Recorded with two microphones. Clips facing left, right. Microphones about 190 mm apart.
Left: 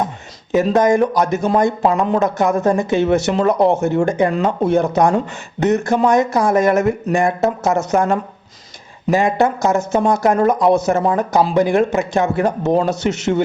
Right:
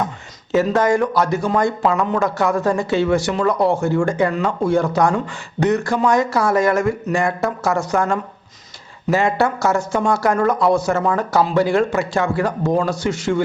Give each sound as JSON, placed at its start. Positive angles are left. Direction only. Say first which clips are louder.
{"t": 0.5, "sound": "speech", "louder": "left 2 dB", "side_deg": 20}